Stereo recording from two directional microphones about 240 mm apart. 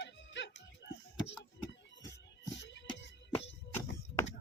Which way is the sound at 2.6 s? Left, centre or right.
Left.